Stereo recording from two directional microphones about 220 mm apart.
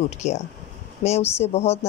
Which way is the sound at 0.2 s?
30° left (ahead or behind).